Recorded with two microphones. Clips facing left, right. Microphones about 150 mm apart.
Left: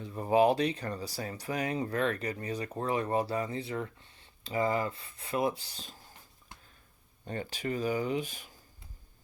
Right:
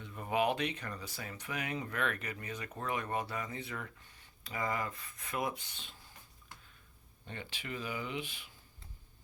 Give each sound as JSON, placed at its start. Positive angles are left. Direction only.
{"t": 0.0, "sound": "speech", "side_deg": 35}
{"t": 7.3, "sound": "speech", "side_deg": 40}